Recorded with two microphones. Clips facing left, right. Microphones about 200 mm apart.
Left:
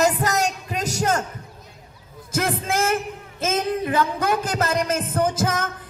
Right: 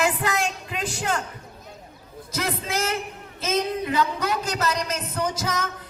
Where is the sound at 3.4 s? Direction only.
50° left (ahead or behind).